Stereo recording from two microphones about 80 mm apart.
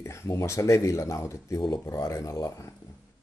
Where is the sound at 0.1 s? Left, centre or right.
Left.